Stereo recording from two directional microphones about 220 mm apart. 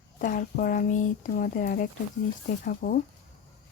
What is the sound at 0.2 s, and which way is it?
Speech, 40° left (ahead or behind).